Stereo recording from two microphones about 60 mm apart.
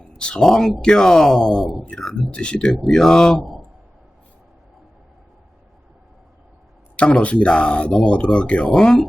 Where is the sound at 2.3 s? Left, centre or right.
Centre.